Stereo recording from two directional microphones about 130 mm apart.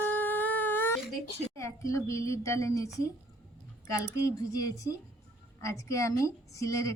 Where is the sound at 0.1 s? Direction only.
15° left (ahead or behind).